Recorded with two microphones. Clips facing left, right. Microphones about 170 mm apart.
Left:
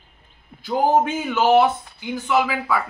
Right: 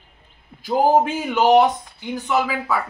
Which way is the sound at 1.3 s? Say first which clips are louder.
Right 2 dB; 15° right (ahead or behind).